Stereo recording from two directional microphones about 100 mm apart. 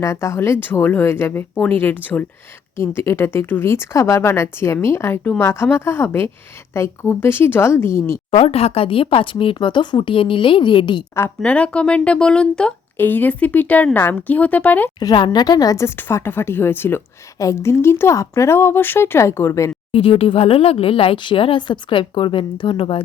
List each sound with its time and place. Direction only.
0.0 s speech: 30° left (ahead or behind)
8.3 s speech: 90° left; by 11.0 s 55° left (ahead or behind)
11.4 s speech: 15° left (ahead or behind)
14.9 s a woman's voice: 45° left (ahead or behind)
16.0 s speech: 25° left (ahead or behind)
19.9 s speech: 65° left (ahead or behind)